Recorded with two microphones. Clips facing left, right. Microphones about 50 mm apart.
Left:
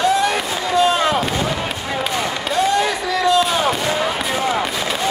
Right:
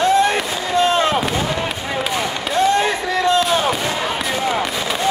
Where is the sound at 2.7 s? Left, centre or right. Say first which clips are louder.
Right 1 dB; right.